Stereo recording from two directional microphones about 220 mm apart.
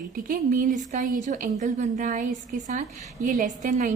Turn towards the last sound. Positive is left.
turn(degrees=-35)  # may be behind; listen again after turning